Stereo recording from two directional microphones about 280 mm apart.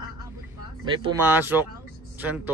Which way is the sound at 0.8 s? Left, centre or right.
Centre.